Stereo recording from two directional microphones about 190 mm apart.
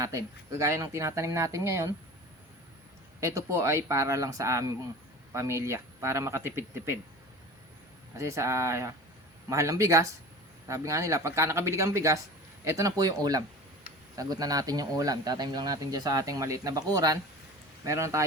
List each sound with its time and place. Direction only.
0.0 s speech: 15° right (ahead or behind)
3.2 s speech: 15° right (ahead or behind)
8.2 s speech: 15° right (ahead or behind)